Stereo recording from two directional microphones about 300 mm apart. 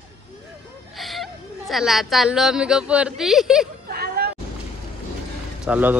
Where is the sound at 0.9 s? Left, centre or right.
Centre.